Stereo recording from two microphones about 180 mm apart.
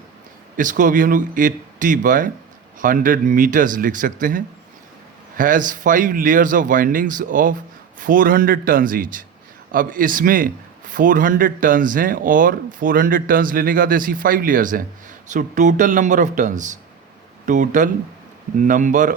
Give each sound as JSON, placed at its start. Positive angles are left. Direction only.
{"t": 0.5, "sound": "a man's voice", "side_deg": -45}